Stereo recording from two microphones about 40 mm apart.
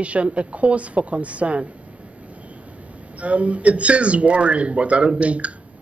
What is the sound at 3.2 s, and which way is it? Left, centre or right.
Speech, right.